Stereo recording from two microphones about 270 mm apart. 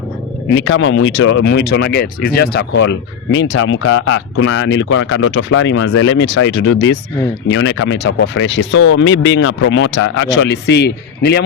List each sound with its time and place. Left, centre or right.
0.5 s speech: left